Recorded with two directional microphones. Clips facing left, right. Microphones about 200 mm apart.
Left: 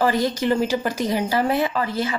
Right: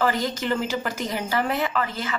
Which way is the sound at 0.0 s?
35° left (ahead or behind).